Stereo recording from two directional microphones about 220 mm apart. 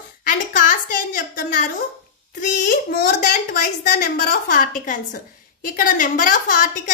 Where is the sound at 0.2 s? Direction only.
40° left (ahead or behind).